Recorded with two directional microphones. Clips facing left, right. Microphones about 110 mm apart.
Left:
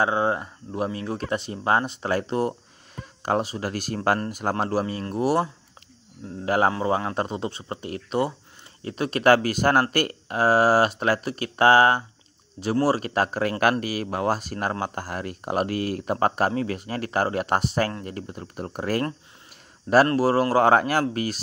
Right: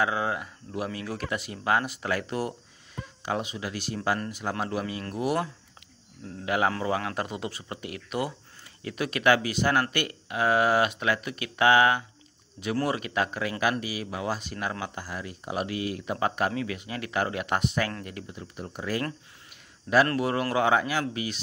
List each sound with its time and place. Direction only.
0.0 s speech: 30° left (ahead or behind)
3.2 s speech: 45° left (ahead or behind)
6.7 s speech: 25° left (ahead or behind); by 19.0 s 50° left (ahead or behind)
20.1 s speech: 35° left (ahead or behind)